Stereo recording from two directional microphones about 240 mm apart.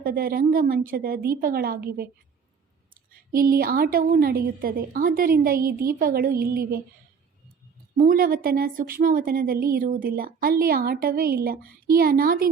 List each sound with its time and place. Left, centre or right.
0.0 s a woman's voice: right
7.9 s a woman's voice: right